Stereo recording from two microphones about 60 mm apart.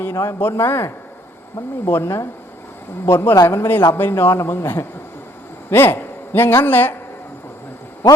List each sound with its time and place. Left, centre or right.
0.1 s speech: left
0.3 s a man's voice: left
3.9 s a man's voice: left